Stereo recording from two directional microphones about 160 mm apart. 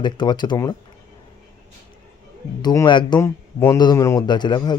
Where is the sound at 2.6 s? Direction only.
25° left (ahead or behind).